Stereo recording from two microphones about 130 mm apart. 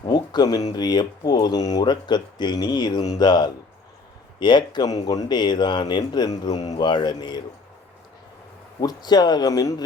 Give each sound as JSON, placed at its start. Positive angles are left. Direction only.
{"t": 0.1, "sound": "a sound", "side_deg": 35}
{"t": 0.7, "sound": "speech", "side_deg": 35}
{"t": 8.8, "sound": "speech", "side_deg": 30}